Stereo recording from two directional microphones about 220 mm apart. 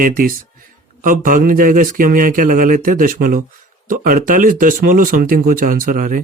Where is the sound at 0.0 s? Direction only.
40° right (ahead or behind).